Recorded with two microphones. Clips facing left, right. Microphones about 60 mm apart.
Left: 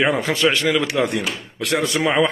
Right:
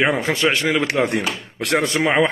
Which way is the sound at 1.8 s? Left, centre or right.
Right.